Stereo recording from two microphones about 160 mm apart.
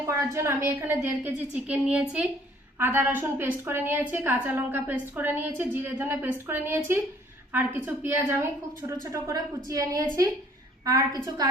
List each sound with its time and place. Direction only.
0.0 s a woman's voice: 20° right (ahead or behind)